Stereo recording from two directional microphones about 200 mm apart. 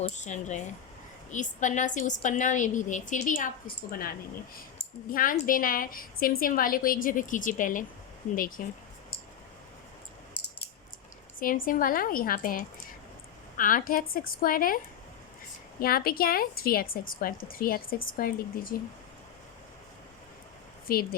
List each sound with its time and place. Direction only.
0.0 s a woman's voice: 35° left (ahead or behind)
4.8 s speech: 45° left (ahead or behind)
11.3 s speech: 45° left (ahead or behind)
15.8 s speech: 50° left (ahead or behind)
20.8 s speech: 50° left (ahead or behind)